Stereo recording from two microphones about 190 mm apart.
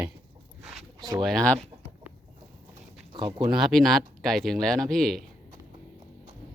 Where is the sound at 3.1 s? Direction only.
25° right (ahead or behind).